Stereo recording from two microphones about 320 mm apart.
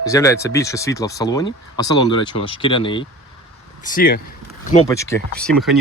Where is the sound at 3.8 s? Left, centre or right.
Left.